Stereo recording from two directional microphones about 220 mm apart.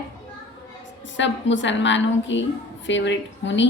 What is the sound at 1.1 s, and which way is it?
A woman's voice, 55° left (ahead or behind).